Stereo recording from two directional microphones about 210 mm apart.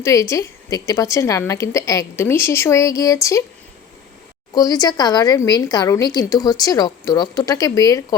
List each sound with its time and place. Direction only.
0.0 s speech: 15° left (ahead or behind)
4.5 s speech: 20° left (ahead or behind)